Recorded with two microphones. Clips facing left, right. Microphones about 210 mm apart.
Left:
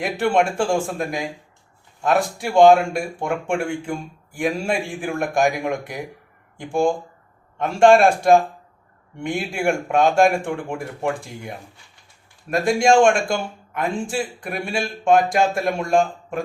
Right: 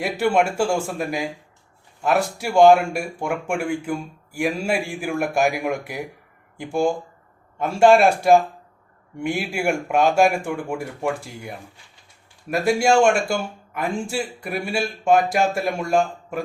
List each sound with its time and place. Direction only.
0.0 s a man's voice: 5° right (ahead or behind)
14.4 s a man's voice: 5° right (ahead or behind)